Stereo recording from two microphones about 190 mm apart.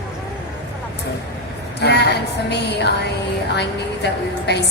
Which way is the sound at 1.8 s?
60° left (ahead or behind).